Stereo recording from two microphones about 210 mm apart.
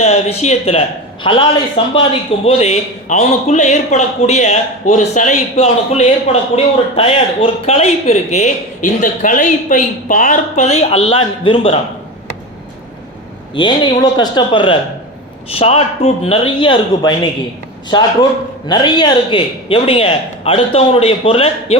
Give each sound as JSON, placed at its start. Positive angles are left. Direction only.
{"t": 0.0, "sound": "a man's voice", "side_deg": 30}
{"t": 13.5, "sound": "a man's voice", "side_deg": 20}